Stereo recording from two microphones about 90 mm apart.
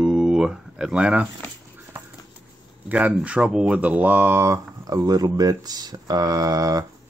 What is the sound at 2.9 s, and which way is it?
Speech, 15° right (ahead or behind).